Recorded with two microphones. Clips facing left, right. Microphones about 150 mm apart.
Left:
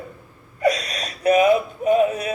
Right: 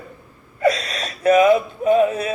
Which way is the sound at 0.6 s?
30° right (ahead or behind).